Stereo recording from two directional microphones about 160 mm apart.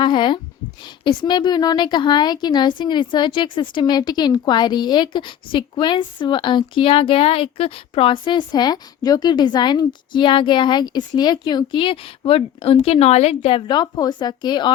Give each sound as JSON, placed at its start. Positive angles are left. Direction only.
{"t": 0.0, "sound": "speech", "side_deg": 30}